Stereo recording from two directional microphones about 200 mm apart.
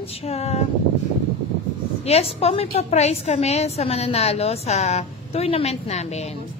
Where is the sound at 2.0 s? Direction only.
30° left (ahead or behind).